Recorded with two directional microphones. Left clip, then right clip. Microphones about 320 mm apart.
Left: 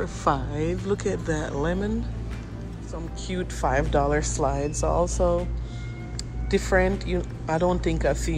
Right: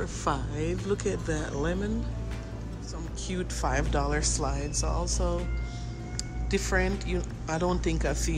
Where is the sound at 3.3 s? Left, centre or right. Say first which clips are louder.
Left 5 dB; centre.